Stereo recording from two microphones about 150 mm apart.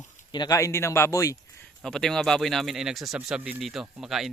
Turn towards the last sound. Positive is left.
turn(degrees=0)  # may be behind; listen again after turning